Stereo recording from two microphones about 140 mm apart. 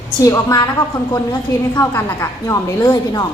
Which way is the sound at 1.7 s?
20° left (ahead or behind).